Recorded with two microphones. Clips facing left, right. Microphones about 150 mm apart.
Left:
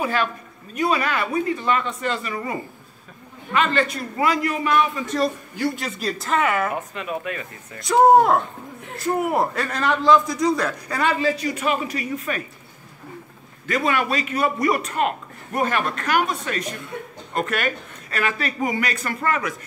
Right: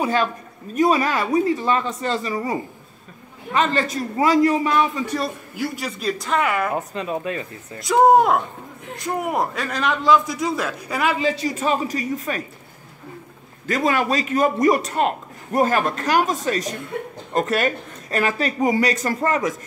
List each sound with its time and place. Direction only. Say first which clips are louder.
0.7 s a man's voice: right 4 dB; 40° right (ahead or behind)
2.1 s speech: right 4 dB; 20° right (ahead or behind)
3.5 s a man's voice: right 1 dB; 40° right (ahead or behind)
5.1 s a man's voice: left 3 dB; 5° right (ahead or behind)
6.8 s speech: right 3 dB; 35° right (ahead or behind)
7.8 s a man's voice: even; centre (ahead or behind)
11.6 s a man's voice: right 3 dB; 35° right (ahead or behind)
13.7 s a man's voice: right 2 dB; 40° right (ahead or behind)